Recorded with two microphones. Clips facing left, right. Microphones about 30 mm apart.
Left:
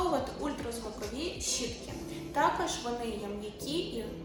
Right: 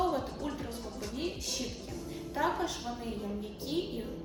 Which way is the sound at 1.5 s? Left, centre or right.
Left.